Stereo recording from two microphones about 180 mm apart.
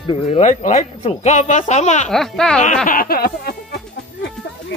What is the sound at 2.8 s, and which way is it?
Speech, 55° left (ahead or behind).